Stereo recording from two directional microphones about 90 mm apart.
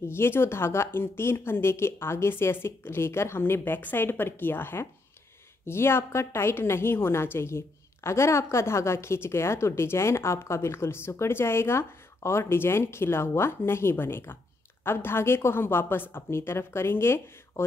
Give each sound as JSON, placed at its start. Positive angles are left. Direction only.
{"t": 0.1, "sound": "a woman's voice", "side_deg": 25}